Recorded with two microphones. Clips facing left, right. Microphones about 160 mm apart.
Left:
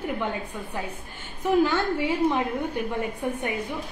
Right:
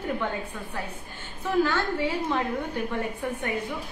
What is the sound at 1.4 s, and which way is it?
A woman's voice, 15° left (ahead or behind).